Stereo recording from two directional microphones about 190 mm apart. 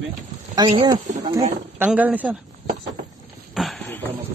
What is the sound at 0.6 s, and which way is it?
Speech, 25° right (ahead or behind).